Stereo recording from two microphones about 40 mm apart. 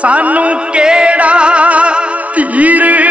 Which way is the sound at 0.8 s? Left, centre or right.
Right.